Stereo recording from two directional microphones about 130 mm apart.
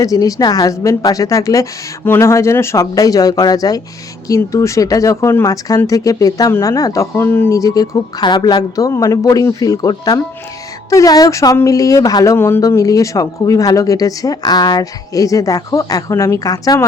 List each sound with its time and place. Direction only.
0.0 s speech: 25° left (ahead or behind)